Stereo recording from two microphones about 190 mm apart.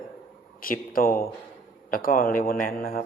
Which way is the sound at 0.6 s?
50° left (ahead or behind).